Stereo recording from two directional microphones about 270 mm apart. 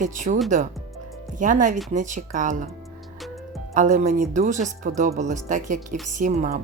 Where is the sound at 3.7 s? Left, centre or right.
Right.